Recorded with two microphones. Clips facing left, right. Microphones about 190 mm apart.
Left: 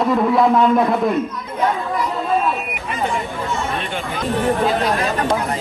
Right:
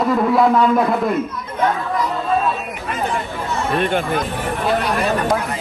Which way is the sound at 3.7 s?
55° right (ahead or behind).